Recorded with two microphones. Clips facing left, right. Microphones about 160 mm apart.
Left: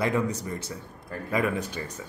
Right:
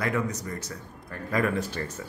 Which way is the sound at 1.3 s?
5° left (ahead or behind).